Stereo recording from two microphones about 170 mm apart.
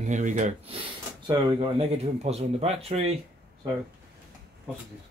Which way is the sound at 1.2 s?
25° right (ahead or behind).